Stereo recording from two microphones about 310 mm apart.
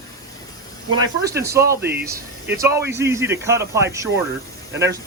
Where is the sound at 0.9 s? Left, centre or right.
Centre.